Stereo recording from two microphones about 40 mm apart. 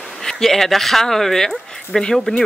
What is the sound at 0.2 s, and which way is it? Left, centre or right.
Speech, centre.